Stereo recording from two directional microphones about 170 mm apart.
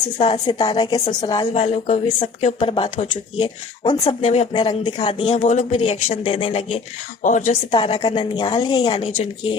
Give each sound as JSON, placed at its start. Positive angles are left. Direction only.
{"t": 0.4, "sound": "a woman's voice", "side_deg": 25}
{"t": 1.5, "sound": "speech", "side_deg": 40}
{"t": 4.0, "sound": "speech", "side_deg": 40}
{"t": 4.5, "sound": "speech", "side_deg": 25}
{"t": 7.2, "sound": "speech", "side_deg": 45}
{"t": 7.7, "sound": "a woman's voice", "side_deg": 30}